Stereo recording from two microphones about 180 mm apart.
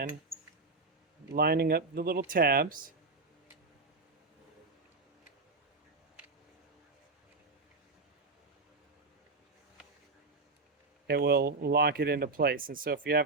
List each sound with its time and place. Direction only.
1.3 s speech: 60° right (ahead or behind)
11.0 s speech: 65° right (ahead or behind)